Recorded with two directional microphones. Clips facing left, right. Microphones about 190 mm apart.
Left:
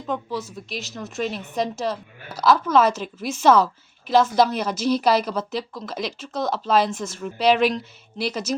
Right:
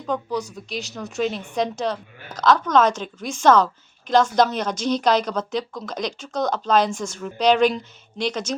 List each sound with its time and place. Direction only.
0.1 s speech: 5° left (ahead or behind)